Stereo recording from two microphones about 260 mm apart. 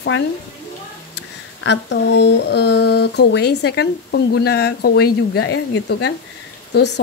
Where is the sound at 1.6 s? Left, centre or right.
Left.